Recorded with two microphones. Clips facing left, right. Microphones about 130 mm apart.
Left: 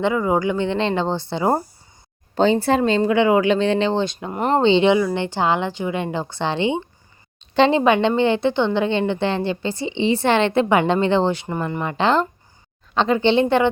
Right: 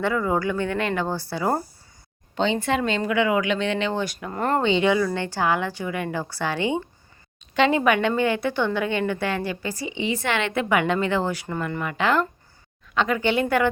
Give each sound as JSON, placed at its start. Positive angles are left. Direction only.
{"t": 0.0, "sound": "a woman's voice", "side_deg": 15}
{"t": 2.3, "sound": "a woman's voice", "side_deg": 40}